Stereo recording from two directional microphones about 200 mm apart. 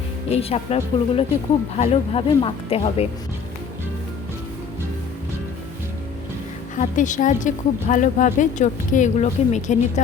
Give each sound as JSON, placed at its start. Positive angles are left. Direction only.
{"t": 0.3, "sound": "a woman's voice", "side_deg": 30}
{"t": 6.7, "sound": "a woman's voice", "side_deg": 40}